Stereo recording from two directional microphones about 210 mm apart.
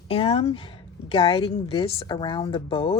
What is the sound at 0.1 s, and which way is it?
A woman's voice, 25° left (ahead or behind).